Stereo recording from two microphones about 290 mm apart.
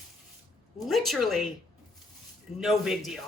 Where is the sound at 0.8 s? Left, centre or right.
Centre.